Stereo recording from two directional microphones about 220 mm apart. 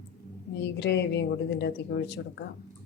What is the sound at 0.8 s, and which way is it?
Speech, 50° left (ahead or behind).